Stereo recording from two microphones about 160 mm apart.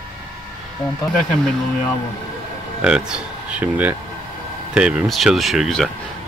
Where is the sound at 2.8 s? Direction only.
5° right (ahead or behind).